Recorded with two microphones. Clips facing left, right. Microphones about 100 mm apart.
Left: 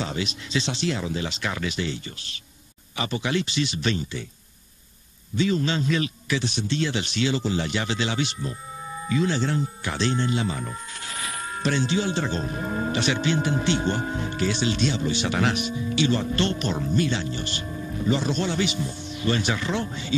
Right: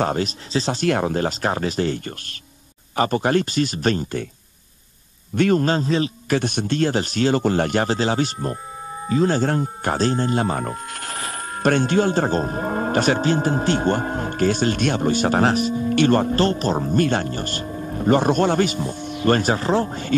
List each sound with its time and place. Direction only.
0.0 s speech: 50° right (ahead or behind)
5.3 s speech: 55° right (ahead or behind); by 6.3 s 35° right (ahead or behind)
6.3 s speech: 55° right (ahead or behind)
11.1 s speech: 45° right (ahead or behind)